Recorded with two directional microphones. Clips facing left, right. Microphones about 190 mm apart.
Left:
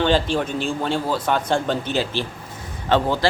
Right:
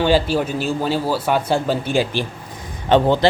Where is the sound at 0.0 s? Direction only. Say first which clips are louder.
Right 3 dB; 5° right (ahead or behind).